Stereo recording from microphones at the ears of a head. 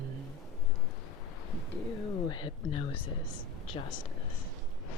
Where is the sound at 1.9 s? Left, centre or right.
Left.